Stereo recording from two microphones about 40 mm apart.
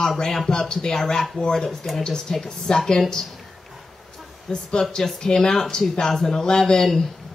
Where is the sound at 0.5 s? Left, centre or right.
Centre.